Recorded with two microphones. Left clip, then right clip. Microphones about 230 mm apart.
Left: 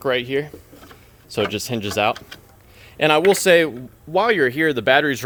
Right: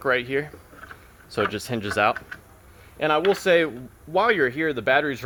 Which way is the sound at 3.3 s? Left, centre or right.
Left.